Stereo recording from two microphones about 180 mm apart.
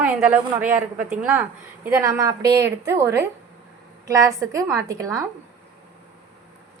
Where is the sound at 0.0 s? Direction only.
10° right (ahead or behind).